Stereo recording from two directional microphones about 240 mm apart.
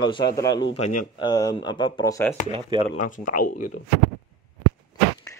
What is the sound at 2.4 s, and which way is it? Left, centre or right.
Speech, right.